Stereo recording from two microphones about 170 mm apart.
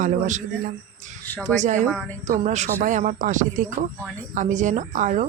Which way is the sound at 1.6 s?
45° right (ahead or behind).